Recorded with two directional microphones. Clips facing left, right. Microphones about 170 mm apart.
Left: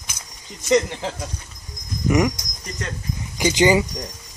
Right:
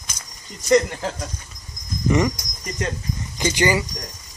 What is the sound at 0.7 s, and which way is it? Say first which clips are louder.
Speech: right 1 dB; 5° right (ahead or behind).